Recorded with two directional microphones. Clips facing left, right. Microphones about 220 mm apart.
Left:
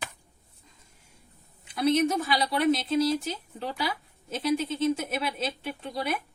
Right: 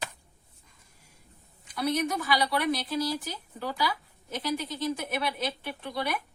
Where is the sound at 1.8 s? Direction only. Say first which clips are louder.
Left 5 dB; 25° left (ahead or behind).